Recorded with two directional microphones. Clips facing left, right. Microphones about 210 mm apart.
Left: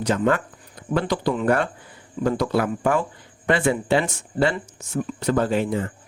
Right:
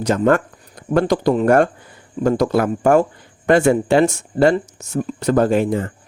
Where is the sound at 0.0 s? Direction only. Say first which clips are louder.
Right 5 dB; 45° right (ahead or behind).